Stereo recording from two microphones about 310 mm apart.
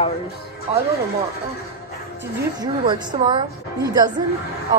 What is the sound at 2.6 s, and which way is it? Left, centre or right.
Speech, centre.